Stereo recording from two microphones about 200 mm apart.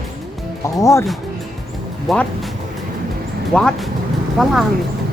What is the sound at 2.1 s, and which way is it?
Speech, centre (ahead or behind).